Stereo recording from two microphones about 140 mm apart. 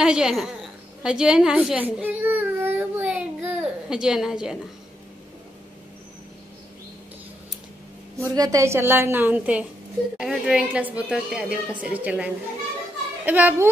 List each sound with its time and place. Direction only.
0.0 s a woman's voice: 5° right (ahead or behind)
1.9 s child singing: 15° right (ahead or behind)
8.2 s speech: 25° right (ahead or behind)